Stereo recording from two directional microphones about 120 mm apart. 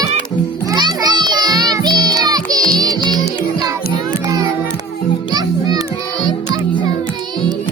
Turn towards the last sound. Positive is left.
turn(degrees=-35)  # may be behind; listen again after turning